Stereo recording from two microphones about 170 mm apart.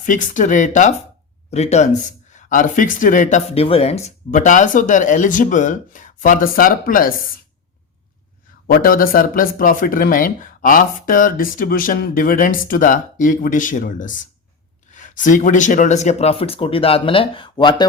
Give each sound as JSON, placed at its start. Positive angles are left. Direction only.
{"t": 0.0, "sound": "speech", "side_deg": 50}
{"t": 8.6, "sound": "speech", "side_deg": 60}